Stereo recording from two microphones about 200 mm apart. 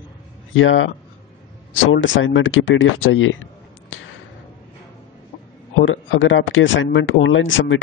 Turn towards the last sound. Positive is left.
turn(degrees=70)  # may be behind; listen again after turning